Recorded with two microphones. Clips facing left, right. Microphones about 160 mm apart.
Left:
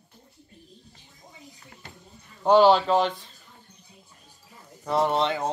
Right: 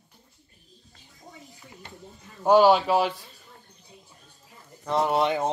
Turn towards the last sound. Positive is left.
turn(degrees=-20)  # may be behind; listen again after turning